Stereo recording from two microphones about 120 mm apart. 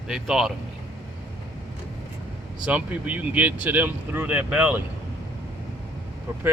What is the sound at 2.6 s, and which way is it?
Speech, 10° right (ahead or behind).